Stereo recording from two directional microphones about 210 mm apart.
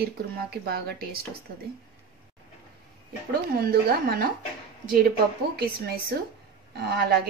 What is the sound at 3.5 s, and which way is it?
Speech, 45° right (ahead or behind).